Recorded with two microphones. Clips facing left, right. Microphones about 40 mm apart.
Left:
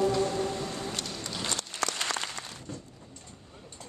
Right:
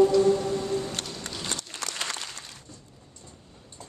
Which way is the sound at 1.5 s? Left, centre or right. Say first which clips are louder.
Left 4 dB; left.